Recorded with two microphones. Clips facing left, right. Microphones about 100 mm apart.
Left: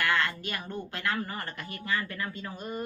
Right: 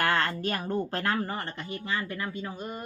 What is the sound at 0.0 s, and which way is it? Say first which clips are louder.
A woman's voice: right 2 dB; 40° right (ahead or behind).